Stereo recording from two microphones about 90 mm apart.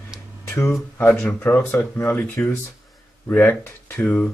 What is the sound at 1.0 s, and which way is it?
Speech, 25° left (ahead or behind).